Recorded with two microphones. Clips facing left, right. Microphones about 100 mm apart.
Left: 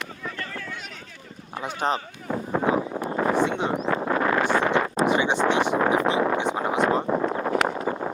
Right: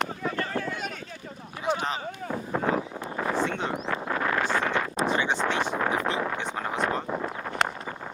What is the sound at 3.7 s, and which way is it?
Speech, 45° left (ahead or behind).